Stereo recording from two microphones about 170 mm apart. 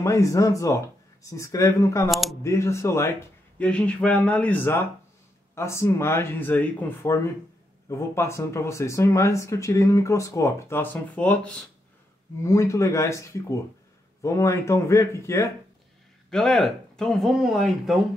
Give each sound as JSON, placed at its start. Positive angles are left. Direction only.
{"t": 0.0, "sound": "speech", "side_deg": 15}
{"t": 2.0, "sound": "speech", "side_deg": 0}
{"t": 2.4, "sound": "speech", "side_deg": 15}
{"t": 16.3, "sound": "speech", "side_deg": 5}